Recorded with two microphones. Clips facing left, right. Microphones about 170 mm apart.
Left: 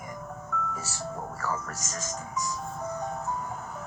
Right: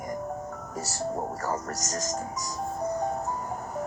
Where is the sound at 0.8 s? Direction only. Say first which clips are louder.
Right 5 dB; 40° right (ahead or behind).